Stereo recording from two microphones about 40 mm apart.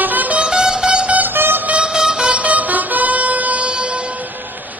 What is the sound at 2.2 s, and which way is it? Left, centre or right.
Music, right.